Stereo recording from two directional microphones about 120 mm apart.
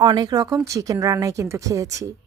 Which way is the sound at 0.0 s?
35° right (ahead or behind).